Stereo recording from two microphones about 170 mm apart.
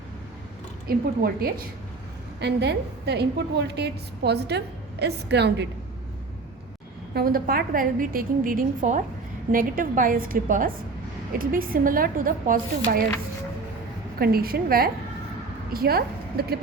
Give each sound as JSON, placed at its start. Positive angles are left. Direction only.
{"t": 0.9, "sound": "a woman's voice", "side_deg": -65}
{"t": 2.4, "sound": "a woman's voice", "side_deg": -80}
{"t": 7.1, "sound": "a woman's voice", "side_deg": -65}
{"t": 14.2, "sound": "a woman's voice", "side_deg": -60}